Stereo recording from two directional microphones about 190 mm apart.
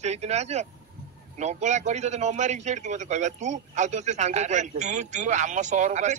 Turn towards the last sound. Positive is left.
turn(degrees=-35)  # may be behind; listen again after turning